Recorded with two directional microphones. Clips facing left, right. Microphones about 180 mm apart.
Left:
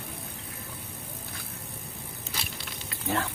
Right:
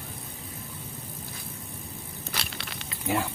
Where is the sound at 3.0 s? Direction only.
15° right (ahead or behind).